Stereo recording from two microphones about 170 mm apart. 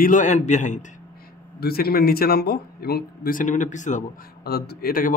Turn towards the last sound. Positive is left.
turn(degrees=60)  # may be behind; listen again after turning